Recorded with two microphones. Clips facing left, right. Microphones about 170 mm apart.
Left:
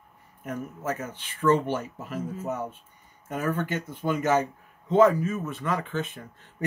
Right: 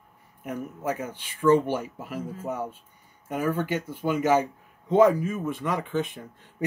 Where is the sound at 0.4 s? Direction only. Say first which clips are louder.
Right 1 dB; 15° right (ahead or behind).